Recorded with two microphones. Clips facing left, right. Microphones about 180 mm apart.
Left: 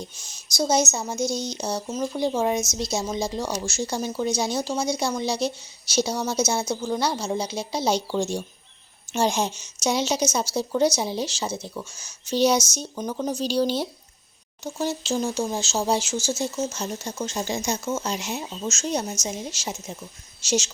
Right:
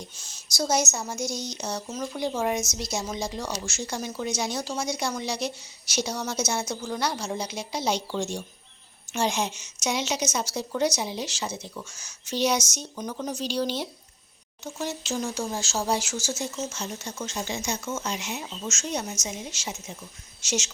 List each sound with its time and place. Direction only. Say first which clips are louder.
0.2 s speech: left 3 dB; 15° left (ahead or behind)
16.7 s speech: left 4 dB; 40° left (ahead or behind)